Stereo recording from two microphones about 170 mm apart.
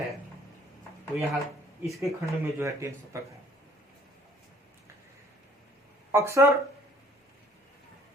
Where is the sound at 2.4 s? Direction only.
15° right (ahead or behind).